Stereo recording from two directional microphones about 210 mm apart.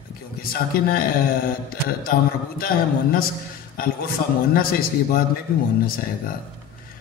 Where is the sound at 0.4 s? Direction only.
45° left (ahead or behind).